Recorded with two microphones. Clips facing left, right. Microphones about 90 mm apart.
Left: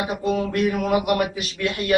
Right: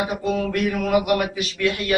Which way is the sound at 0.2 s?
5° left (ahead or behind).